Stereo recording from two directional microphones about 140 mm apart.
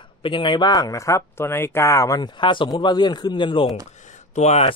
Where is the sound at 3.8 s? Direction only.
60° left (ahead or behind).